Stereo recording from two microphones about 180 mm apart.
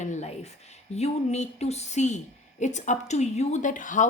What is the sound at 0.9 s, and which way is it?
Speech, 40° left (ahead or behind).